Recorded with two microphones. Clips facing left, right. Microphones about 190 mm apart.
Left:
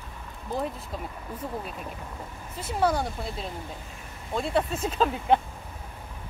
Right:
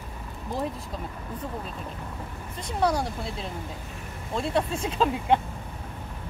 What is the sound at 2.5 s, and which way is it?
Speech, 5° left (ahead or behind).